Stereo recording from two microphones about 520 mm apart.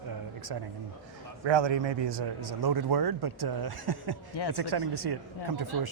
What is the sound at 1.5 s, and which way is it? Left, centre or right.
A man's voice, right.